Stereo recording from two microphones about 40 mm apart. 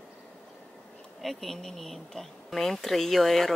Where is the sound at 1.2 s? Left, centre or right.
Centre.